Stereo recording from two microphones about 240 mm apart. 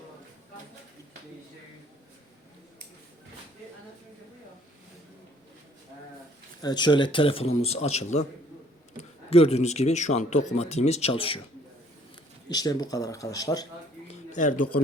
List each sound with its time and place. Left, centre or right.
6.6 s speech: centre
9.3 s speech: left
12.5 s speech: centre
14.3 s speech: left